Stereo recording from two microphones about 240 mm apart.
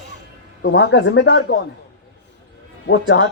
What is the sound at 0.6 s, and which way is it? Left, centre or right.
Speech, left.